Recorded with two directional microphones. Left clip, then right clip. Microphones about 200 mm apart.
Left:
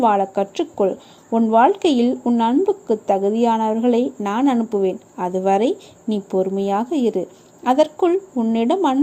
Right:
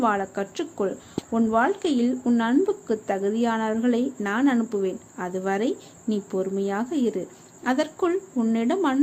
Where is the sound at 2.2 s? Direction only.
15° left (ahead or behind).